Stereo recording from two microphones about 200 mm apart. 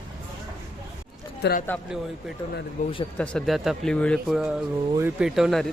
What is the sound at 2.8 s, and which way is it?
Speech, 40° left (ahead or behind).